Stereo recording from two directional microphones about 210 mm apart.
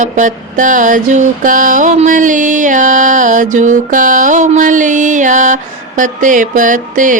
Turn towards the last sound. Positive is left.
turn(degrees=-40)  # may be behind; listen again after turning